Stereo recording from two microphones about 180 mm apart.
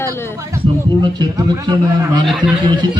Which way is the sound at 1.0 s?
25° right (ahead or behind).